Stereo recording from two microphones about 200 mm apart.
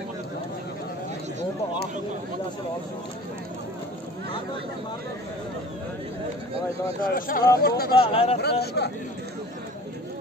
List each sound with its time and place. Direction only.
7.0 s speech: 45° left (ahead or behind)
8.0 s speech: 30° left (ahead or behind)
8.4 s speech: 55° left (ahead or behind)